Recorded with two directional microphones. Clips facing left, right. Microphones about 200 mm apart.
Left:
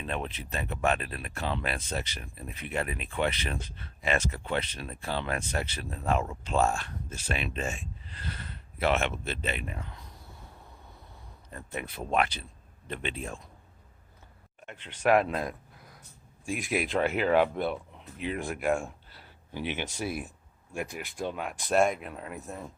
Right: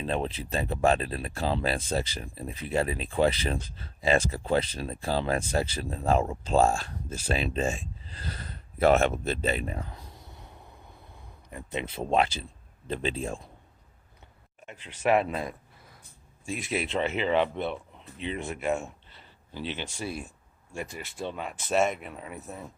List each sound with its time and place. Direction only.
0.0 s speech: 30° right (ahead or behind)
11.5 s speech: 20° right (ahead or behind)
14.7 s speech: 5° right (ahead or behind)
19.5 s speech: 15° left (ahead or behind)
20.7 s speech: centre (ahead or behind)